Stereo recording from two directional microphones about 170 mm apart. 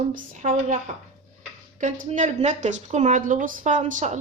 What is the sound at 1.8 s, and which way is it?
Speech, 50° right (ahead or behind).